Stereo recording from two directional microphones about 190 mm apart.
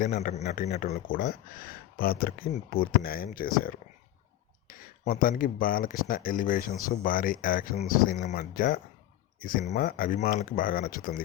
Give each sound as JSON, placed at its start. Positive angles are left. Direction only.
{"t": 0.0, "sound": "speech", "side_deg": 45}
{"t": 4.7, "sound": "speech", "side_deg": 45}